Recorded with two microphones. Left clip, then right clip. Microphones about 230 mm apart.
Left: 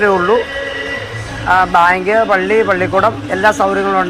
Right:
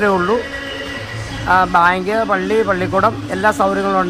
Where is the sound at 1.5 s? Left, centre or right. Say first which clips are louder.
Left 2 dB; right.